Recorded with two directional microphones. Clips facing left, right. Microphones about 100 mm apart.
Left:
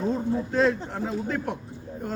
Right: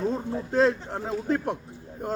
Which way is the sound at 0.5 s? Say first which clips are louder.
Right 3 dB; 35° right (ahead or behind).